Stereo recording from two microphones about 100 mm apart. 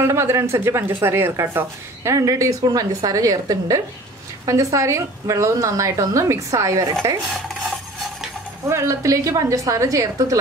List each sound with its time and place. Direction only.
0.0 s a woman's voice: 25° right (ahead or behind)
8.6 s a woman's voice: 30° right (ahead or behind)